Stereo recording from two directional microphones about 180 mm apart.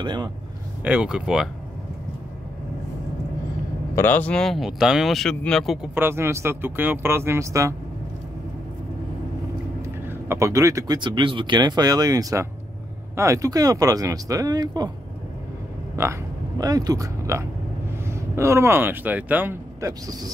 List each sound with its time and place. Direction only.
0.0 s speech: 25° right (ahead or behind)
0.8 s speech: 5° right (ahead or behind)
3.9 s speech: 10° left (ahead or behind)
5.9 s speech: 15° right (ahead or behind)
9.8 s speech: 15° right (ahead or behind)
16.0 s speech: 20° right (ahead or behind)